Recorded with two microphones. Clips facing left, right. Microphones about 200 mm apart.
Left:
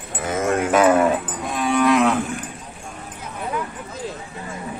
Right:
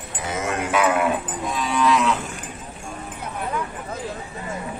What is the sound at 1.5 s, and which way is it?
Cattle, 55° left (ahead or behind).